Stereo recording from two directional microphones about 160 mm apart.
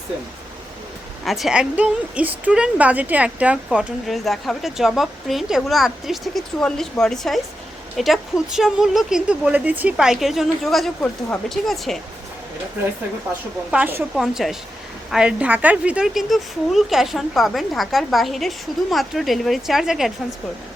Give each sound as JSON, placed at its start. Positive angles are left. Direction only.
{"t": 1.2, "sound": "speech", "side_deg": 0}
{"t": 13.7, "sound": "a woman's voice", "side_deg": -10}